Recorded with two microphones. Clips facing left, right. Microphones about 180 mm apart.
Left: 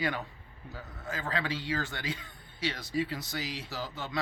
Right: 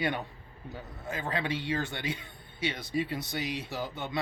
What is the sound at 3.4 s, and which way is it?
Speech, 60° right (ahead or behind).